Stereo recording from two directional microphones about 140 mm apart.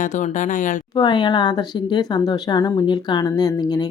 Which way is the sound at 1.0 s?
30° left (ahead or behind).